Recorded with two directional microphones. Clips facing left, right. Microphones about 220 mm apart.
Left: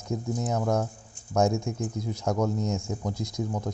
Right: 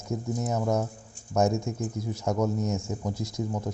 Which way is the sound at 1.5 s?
20° right (ahead or behind).